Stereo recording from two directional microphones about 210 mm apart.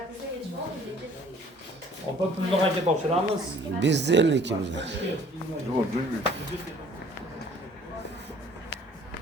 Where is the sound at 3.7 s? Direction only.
55° right (ahead or behind).